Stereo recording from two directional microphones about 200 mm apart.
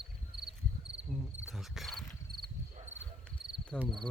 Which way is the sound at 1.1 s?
Centre (ahead or behind).